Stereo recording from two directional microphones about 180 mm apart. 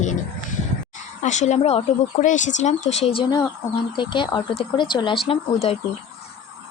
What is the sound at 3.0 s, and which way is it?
Speech, 30° left (ahead or behind).